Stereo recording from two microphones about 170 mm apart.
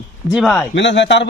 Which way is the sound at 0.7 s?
90° left.